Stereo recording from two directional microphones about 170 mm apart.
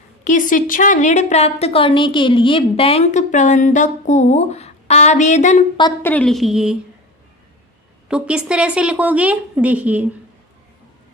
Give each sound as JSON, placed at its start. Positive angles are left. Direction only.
{"t": 0.3, "sound": "a woman's voice", "side_deg": 50}
{"t": 6.0, "sound": "a woman's voice", "side_deg": 10}
{"t": 8.0, "sound": "a woman's voice", "side_deg": -5}